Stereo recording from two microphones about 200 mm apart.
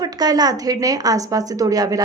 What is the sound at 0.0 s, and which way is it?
A woman's voice, 20° right (ahead or behind).